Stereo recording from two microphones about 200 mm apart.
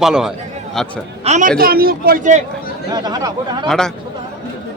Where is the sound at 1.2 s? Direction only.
35° right (ahead or behind).